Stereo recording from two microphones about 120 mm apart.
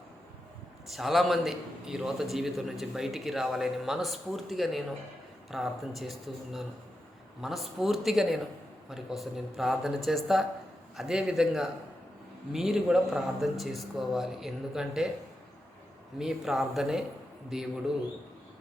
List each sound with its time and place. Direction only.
0.9 s a man's voice: centre (ahead or behind)
16.1 s a man's voice: 5° right (ahead or behind)